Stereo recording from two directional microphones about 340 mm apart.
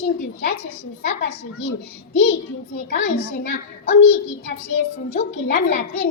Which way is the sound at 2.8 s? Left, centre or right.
Left.